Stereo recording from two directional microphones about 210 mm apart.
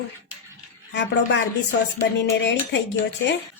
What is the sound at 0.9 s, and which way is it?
A woman's voice, 55° left (ahead or behind).